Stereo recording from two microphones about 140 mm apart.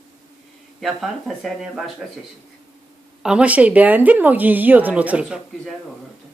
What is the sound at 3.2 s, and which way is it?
Speech, 10° right (ahead or behind).